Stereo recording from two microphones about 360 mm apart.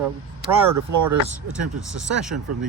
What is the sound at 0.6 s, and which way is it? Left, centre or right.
Speech, right.